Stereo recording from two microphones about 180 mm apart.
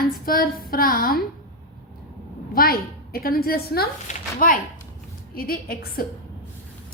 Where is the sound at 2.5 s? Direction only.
55° left (ahead or behind).